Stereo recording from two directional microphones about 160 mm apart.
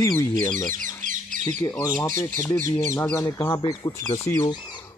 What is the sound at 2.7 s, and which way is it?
Speech, 15° left (ahead or behind).